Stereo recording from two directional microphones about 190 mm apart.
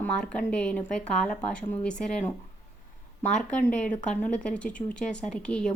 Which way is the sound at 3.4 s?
5° left (ahead or behind).